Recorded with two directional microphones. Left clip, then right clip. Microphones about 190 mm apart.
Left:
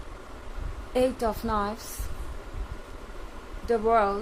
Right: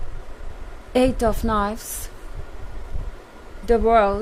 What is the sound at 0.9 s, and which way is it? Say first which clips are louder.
A woman's voice: right 6 dB; 40° right (ahead or behind).